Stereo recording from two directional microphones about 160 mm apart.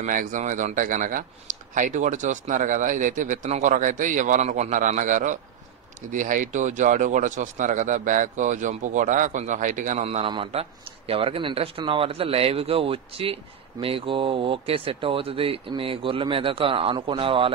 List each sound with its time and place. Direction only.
0.0 s speech: 55° right (ahead or behind)
10.0 s a man's voice: 35° right (ahead or behind)